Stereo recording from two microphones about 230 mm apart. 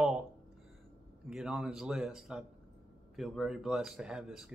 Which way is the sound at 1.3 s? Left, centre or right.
Centre.